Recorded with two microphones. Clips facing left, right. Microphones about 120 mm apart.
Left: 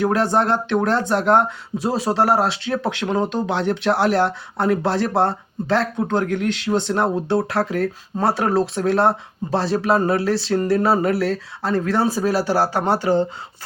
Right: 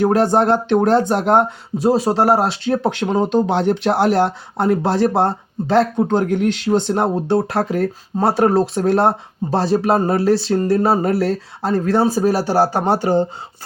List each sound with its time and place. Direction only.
0.0 s speech: 45° right (ahead or behind)